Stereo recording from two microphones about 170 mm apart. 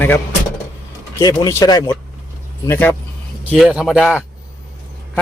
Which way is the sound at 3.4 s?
10° right (ahead or behind).